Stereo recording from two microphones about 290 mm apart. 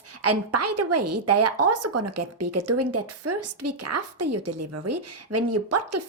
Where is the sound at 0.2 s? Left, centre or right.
Right.